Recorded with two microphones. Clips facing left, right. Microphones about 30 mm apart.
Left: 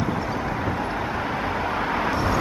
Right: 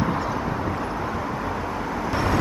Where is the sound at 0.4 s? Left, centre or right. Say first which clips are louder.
Even; centre; by 2.1 s left.